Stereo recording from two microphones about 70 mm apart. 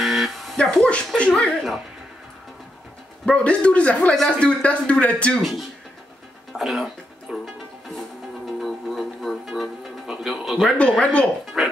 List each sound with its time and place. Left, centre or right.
0.0 s a sound: centre
0.7 s a sound: centre
1.1 s chuckle: centre
3.3 s speech: centre
5.4 s speech: centre
6.5 s music: centre
8.5 s music: centre
10.8 s speech: centre
11.6 s music: centre